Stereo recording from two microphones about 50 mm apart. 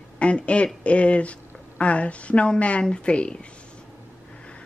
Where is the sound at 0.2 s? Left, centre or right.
Left.